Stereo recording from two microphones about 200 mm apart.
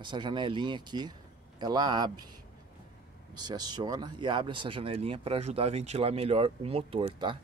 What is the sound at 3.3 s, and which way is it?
Speech, 20° right (ahead or behind).